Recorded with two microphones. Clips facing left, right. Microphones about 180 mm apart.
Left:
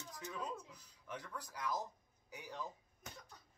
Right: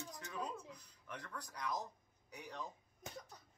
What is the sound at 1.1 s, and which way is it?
Speech, 5° left (ahead or behind).